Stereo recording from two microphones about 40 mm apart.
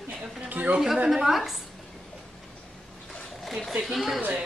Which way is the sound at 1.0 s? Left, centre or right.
Centre.